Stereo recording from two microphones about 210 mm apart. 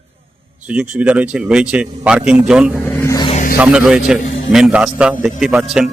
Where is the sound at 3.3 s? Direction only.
35° left (ahead or behind).